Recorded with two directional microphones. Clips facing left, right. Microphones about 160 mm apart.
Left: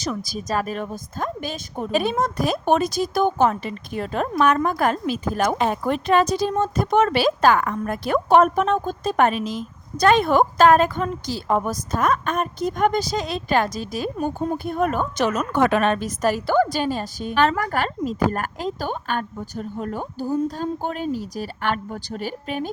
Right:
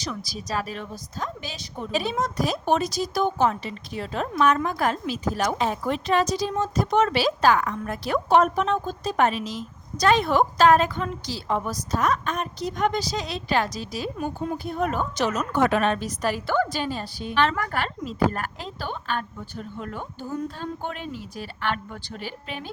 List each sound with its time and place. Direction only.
0.0 s a woman's voice: 45° left (ahead or behind)